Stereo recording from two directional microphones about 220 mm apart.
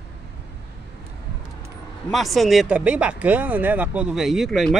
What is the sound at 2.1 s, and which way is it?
Speech, centre (ahead or behind).